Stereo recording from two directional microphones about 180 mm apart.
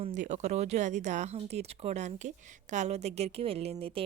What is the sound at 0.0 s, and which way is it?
A woman's voice, 40° right (ahead or behind).